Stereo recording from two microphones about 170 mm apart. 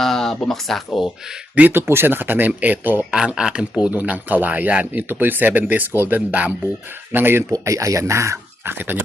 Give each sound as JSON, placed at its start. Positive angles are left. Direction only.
{"t": 0.0, "sound": "speech", "side_deg": 0}
{"t": 1.5, "sound": "speech", "side_deg": -10}